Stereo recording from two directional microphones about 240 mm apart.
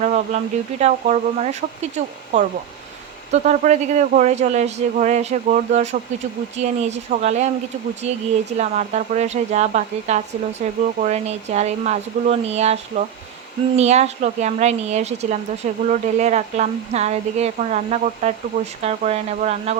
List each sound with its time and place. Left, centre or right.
0.0 s speech: right